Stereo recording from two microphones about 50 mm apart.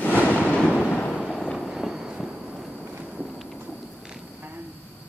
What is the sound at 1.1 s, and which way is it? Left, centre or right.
Fireworks, centre.